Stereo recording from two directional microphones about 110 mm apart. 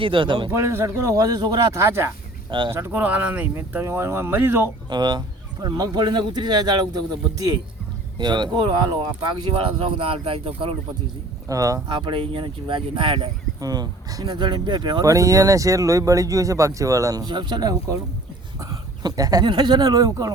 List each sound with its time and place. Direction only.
0.0 s speech: 50° right (ahead or behind)
0.5 s speech: 25° right (ahead or behind)
4.9 s speech: 45° right (ahead or behind)
10.0 s speech: 55° right (ahead or behind)
11.4 s speech: 30° right (ahead or behind)
11.9 s speech: 45° right (ahead or behind)
13.6 s speech: 35° right (ahead or behind)